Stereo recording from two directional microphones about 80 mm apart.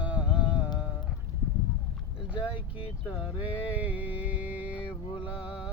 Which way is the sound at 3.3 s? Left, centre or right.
Centre.